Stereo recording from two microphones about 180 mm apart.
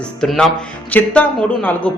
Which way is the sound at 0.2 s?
Centre (ahead or behind).